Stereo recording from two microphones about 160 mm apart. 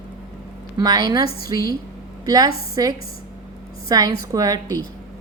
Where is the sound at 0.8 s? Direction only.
25° right (ahead or behind).